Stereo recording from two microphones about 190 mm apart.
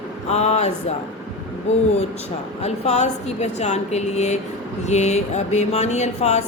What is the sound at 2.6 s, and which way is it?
Speech, 35° left (ahead or behind).